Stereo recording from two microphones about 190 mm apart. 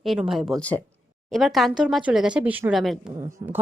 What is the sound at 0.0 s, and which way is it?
Speech, centre (ahead or behind).